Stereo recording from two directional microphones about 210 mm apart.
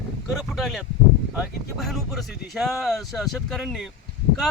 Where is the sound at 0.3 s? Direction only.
Centre (ahead or behind).